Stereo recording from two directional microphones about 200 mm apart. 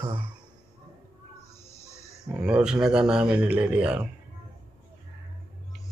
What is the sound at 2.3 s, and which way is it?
Speech, 5° right (ahead or behind).